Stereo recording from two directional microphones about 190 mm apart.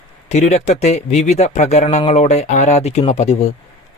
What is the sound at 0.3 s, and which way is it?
Speech, 35° left (ahead or behind).